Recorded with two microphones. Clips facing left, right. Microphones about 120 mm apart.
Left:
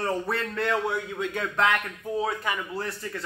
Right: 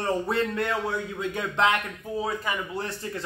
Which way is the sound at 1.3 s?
15° right (ahead or behind).